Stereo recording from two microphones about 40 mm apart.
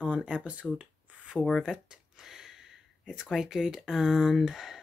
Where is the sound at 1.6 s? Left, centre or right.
Centre.